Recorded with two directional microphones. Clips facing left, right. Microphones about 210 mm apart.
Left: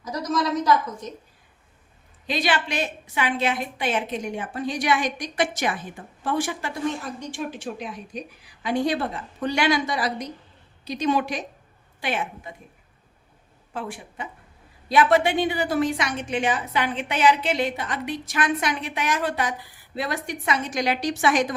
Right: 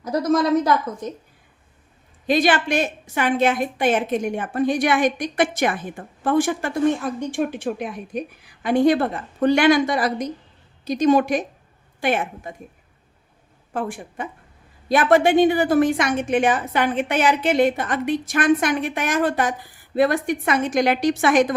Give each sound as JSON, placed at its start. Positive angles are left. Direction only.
{"t": 0.0, "sound": "speech", "side_deg": -55}
{"t": 2.2, "sound": "a woman's voice", "side_deg": -50}
{"t": 13.7, "sound": "a woman's voice", "side_deg": -50}